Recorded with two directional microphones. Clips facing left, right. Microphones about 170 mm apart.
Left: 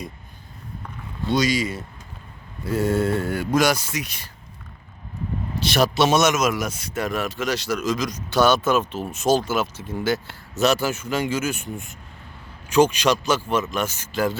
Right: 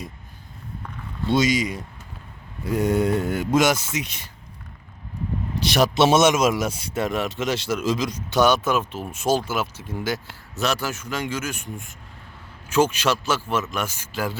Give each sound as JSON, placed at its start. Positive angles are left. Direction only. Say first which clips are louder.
{"t": 1.3, "sound": "speech", "louder": "right 1 dB", "side_deg": -20}
{"t": 5.5, "sound": "speech", "louder": "right 1 dB", "side_deg": -15}
{"t": 10.6, "sound": "speech", "louder": "left 5 dB", "side_deg": 0}
{"t": 12.8, "sound": "speech", "louder": "left 3 dB", "side_deg": -5}